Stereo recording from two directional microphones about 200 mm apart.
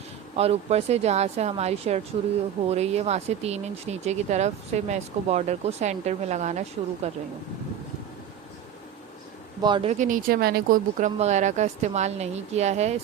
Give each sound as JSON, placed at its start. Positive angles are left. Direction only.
{"t": 0.3, "sound": "speech", "side_deg": -30}
{"t": 9.6, "sound": "speech", "side_deg": -25}